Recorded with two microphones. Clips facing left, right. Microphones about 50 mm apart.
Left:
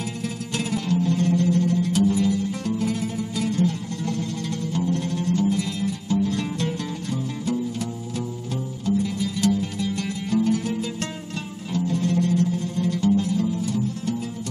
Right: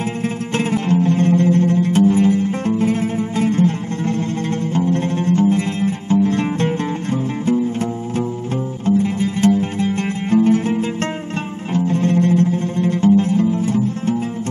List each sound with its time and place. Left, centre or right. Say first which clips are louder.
0.2 s music: right 8 dB; right